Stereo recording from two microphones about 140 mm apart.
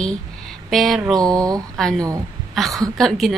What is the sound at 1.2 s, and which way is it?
Speech, 25° right (ahead or behind).